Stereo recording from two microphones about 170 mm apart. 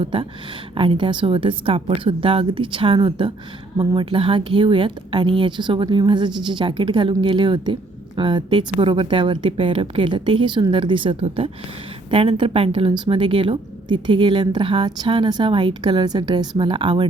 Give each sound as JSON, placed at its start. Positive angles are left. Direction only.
{"t": 0.0, "sound": "a woman's voice", "side_deg": -30}